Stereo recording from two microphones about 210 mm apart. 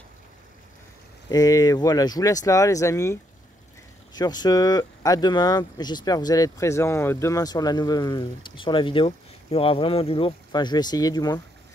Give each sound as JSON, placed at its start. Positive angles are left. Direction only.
{"t": 1.3, "sound": "speech", "side_deg": 15}